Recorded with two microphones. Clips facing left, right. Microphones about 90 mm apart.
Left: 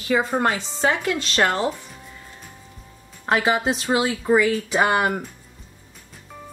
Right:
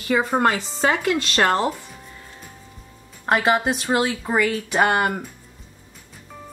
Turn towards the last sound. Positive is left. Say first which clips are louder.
# even
turn(degrees=0)  # may be behind; listen again after turning